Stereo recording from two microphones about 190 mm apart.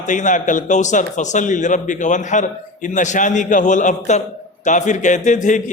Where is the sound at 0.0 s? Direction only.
40° left (ahead or behind).